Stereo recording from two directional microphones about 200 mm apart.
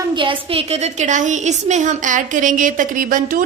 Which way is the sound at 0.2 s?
25° right (ahead or behind).